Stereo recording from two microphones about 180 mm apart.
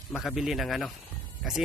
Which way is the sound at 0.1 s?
Centre (ahead or behind).